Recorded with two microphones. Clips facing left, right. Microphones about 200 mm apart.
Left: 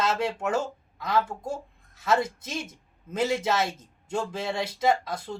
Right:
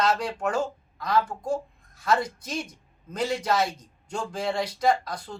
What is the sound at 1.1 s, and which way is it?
Speech, 25° left (ahead or behind).